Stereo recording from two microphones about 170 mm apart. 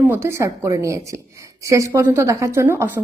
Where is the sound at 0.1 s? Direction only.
15° right (ahead or behind).